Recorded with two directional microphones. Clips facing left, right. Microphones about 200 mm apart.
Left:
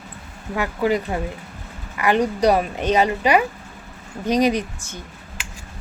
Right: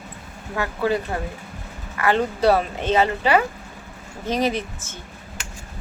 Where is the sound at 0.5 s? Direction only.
15° left (ahead or behind).